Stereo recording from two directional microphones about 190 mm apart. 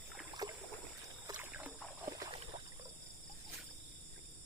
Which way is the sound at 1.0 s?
15° right (ahead or behind).